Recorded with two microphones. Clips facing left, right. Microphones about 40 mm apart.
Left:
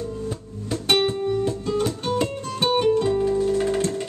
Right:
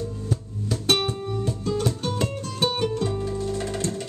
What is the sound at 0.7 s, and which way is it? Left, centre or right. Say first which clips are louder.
Music: left 3 dB; centre.